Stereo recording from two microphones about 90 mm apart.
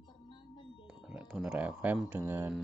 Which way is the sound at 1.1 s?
15° right (ahead or behind).